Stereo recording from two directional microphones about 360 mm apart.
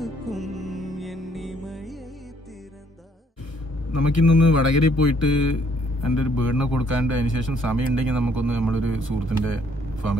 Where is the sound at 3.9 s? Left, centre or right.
Left.